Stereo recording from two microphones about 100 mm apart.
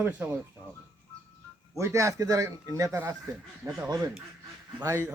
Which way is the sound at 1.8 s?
30° right (ahead or behind).